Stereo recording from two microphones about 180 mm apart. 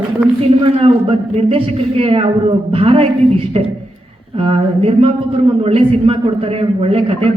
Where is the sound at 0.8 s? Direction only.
30° right (ahead or behind).